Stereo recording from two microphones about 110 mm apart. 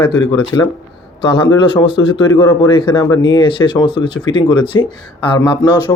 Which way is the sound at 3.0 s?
40° left (ahead or behind).